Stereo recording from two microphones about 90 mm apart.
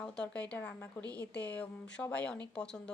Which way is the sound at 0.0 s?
15° left (ahead or behind).